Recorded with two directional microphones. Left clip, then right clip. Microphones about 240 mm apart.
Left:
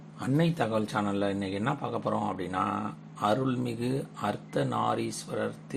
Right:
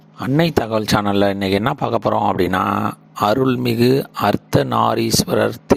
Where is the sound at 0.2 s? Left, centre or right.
Right.